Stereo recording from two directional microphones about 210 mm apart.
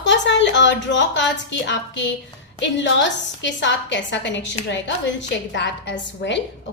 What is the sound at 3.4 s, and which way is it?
A woman's voice, 60° left (ahead or behind).